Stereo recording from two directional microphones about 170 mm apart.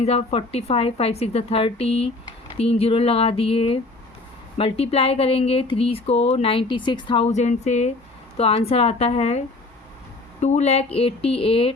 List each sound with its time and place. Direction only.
0.0 s speech: 35° left (ahead or behind)
10.4 s speech: 40° left (ahead or behind)